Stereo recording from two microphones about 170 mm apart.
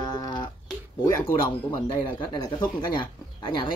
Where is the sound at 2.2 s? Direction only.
25° left (ahead or behind).